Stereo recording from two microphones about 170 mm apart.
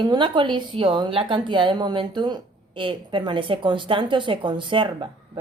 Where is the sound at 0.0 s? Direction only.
25° right (ahead or behind).